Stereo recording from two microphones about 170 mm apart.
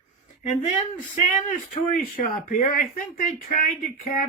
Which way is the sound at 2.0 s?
55° left (ahead or behind).